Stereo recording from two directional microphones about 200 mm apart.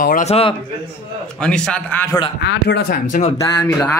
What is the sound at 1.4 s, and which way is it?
Speech, 5° left (ahead or behind).